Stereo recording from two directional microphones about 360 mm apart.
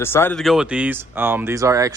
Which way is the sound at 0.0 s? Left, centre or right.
Centre.